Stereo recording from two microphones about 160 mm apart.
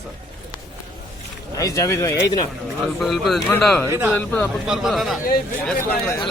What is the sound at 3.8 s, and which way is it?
Speech, 15° right (ahead or behind).